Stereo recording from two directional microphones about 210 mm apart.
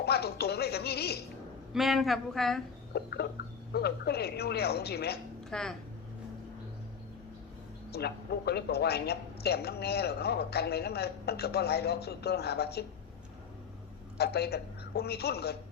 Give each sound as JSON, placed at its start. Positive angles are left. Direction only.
{"t": 0.0, "sound": "music", "side_deg": 50}
{"t": 1.7, "sound": "speech", "side_deg": 0}
{"t": 2.9, "sound": "speech", "side_deg": 50}
{"t": 5.5, "sound": "speech", "side_deg": 5}
{"t": 7.9, "sound": "speech", "side_deg": 50}
{"t": 14.2, "sound": "a woman's voice", "side_deg": 50}